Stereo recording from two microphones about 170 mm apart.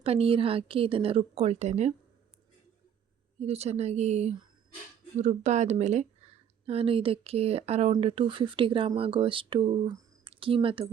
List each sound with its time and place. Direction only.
0.0 s speech: 35° right (ahead or behind)
3.4 s speech: 40° right (ahead or behind)